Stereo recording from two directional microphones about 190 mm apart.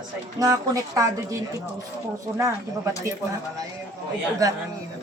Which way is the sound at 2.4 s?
15° right (ahead or behind).